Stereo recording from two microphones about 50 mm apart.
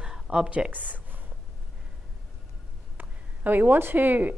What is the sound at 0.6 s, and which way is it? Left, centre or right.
Speech, right.